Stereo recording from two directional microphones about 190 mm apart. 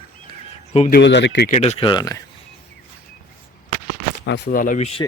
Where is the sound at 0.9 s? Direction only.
65° left (ahead or behind).